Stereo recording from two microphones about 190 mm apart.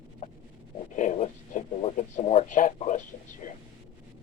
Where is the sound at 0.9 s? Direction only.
40° left (ahead or behind).